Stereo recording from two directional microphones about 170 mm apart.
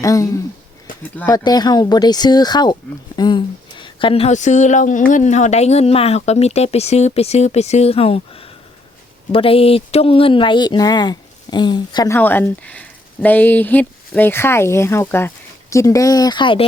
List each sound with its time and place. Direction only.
0.0 s speech: 20° left (ahead or behind)
3.2 s a sound: 25° left (ahead or behind); by 5.0 s 50° left (ahead or behind)
5.1 s speech: 45° left (ahead or behind); by 12.1 s 25° left (ahead or behind)
12.1 s speech: 10° left (ahead or behind); by 16.6 s 30° left (ahead or behind)